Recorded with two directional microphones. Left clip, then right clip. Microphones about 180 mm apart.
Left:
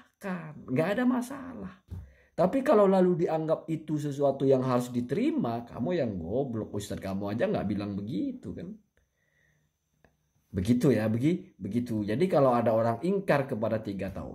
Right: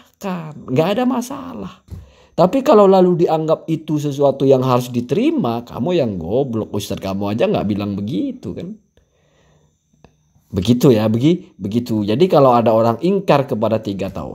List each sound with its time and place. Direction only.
0.0 s speech: 30° right (ahead or behind)
10.0 s speech: 30° right (ahead or behind)